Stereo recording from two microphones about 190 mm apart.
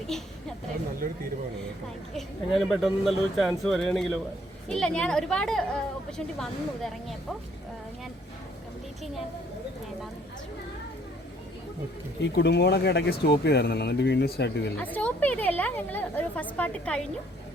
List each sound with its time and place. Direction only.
0.1 s speech: centre (ahead or behind)
1.0 s speech: 45° right (ahead or behind)
2.6 s speech: centre (ahead or behind)
12.2 s speech: 65° left (ahead or behind)
14.8 s a woman's voice: 10° left (ahead or behind)